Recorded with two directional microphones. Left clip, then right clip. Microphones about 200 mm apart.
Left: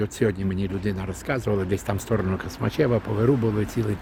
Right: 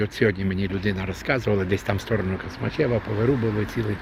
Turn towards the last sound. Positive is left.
turn(degrees=20)  # may be behind; listen again after turning